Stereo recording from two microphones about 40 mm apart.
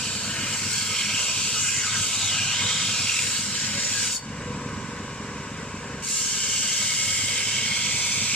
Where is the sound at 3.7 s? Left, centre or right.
Left.